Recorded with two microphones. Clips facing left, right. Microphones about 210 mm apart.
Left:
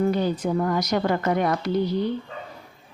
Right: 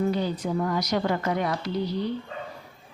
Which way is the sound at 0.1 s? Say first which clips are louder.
Left 3 dB; 50° left (ahead or behind).